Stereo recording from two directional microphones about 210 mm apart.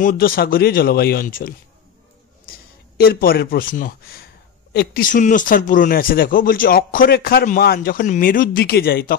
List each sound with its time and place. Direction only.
0.0 s a man's voice: 45° left (ahead or behind)